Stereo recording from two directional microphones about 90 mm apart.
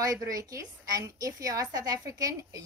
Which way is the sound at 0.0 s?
40° right (ahead or behind).